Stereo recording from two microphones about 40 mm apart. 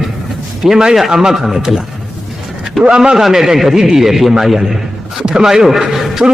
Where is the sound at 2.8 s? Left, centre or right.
Centre.